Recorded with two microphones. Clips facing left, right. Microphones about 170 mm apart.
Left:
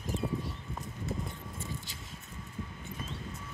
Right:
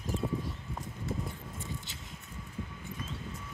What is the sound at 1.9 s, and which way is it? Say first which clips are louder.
Vehicle: even; 25° right (ahead or behind).